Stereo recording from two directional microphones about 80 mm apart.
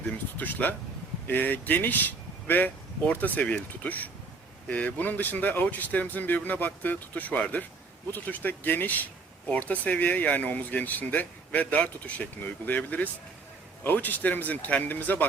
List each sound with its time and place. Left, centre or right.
0.3 s speech: left